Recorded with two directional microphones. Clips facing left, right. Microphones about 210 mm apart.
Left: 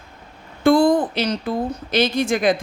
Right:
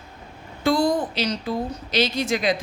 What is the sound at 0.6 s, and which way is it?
A woman's voice, 55° left (ahead or behind).